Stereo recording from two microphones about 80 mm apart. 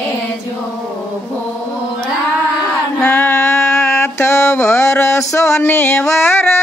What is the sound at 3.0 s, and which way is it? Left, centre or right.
Mantra, left.